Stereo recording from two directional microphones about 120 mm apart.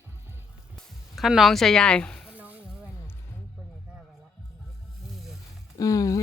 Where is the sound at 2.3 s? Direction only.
15° right (ahead or behind).